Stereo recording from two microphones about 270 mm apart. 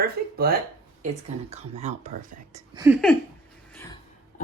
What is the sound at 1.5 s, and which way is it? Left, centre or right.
Speech, right.